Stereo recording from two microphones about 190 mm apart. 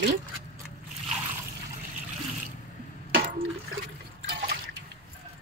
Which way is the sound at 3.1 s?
50° right (ahead or behind).